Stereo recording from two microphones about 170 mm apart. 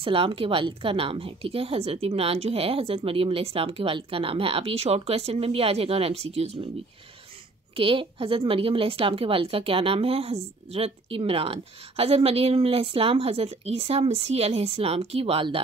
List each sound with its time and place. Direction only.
0.0 s speech: 30° right (ahead or behind)
7.7 s speech: 30° right (ahead or behind)